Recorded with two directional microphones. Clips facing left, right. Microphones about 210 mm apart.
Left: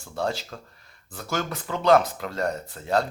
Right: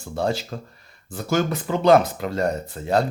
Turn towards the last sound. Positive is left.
turn(degrees=-10)  # may be behind; listen again after turning